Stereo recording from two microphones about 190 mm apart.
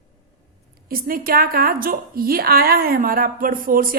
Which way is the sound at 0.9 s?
50° right (ahead or behind).